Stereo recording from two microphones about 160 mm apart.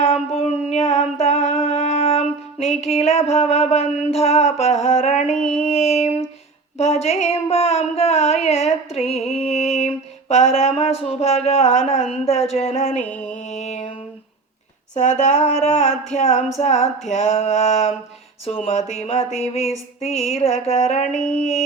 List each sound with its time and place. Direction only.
0.0 s mantra: 40° left (ahead or behind)
1.2 s a sound: 40° left (ahead or behind)
13.0 s music: 10° left (ahead or behind)
13.4 s music: 45° left (ahead or behind)
14.9 s speech: 50° left (ahead or behind)
16.6 s a sound: 40° left (ahead or behind)
21.2 s speech: 50° left (ahead or behind)